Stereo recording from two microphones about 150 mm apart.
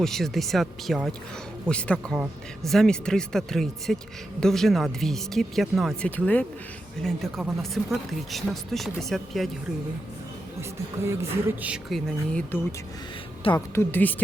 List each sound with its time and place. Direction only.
0.0 s speech: centre (ahead or behind)
6.1 s a woman's voice: 10° left (ahead or behind)
11.0 s music: 15° right (ahead or behind)
11.9 s speech: centre (ahead or behind)
13.7 s a woman's voice: 10° left (ahead or behind)